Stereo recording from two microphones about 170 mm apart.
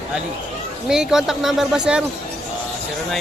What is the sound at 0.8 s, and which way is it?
Speech, 5° right (ahead or behind).